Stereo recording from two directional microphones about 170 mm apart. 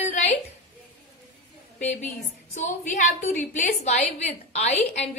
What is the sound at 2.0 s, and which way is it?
A woman's voice, 45° left (ahead or behind).